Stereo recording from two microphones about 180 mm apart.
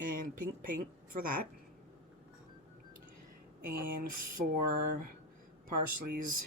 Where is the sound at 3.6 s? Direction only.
55° right (ahead or behind).